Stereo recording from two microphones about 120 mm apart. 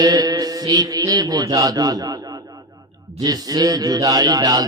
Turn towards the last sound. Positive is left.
turn(degrees=-30)  # may be behind; listen again after turning